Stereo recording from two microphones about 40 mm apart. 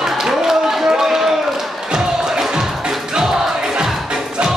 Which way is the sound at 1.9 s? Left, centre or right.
Centre.